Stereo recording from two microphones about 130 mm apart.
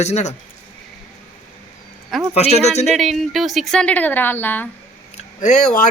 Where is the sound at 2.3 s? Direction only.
55° left (ahead or behind).